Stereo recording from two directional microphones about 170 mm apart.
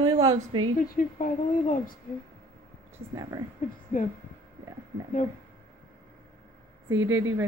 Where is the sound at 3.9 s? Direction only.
50° left (ahead or behind).